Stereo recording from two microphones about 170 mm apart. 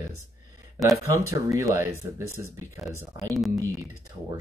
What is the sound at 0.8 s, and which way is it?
Speech, centre (ahead or behind).